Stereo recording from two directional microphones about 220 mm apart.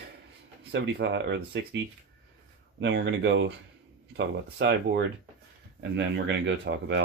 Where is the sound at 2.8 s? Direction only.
55° right (ahead or behind).